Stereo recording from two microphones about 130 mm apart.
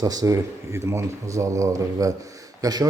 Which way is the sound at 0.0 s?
30° right (ahead or behind).